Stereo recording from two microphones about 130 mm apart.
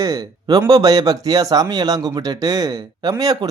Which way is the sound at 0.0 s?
30° right (ahead or behind).